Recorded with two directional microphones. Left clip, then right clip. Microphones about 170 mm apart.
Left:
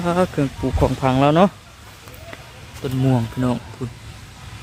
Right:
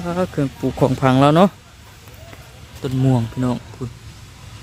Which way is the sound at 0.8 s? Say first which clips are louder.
Right 3 dB; 35° right (ahead or behind).